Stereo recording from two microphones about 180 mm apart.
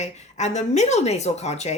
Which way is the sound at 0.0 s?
40° left (ahead or behind).